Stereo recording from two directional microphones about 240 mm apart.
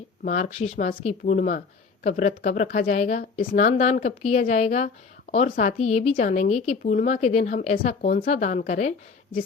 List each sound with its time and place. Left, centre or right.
0.3 s speech: left